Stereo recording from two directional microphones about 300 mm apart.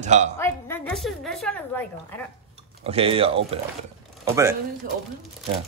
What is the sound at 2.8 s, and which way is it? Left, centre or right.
Mantra, centre.